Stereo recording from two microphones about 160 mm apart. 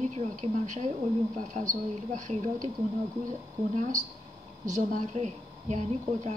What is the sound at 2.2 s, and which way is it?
Speech, 50° right (ahead or behind).